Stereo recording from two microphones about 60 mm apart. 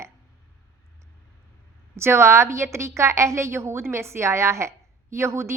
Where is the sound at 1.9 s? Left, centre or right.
Right.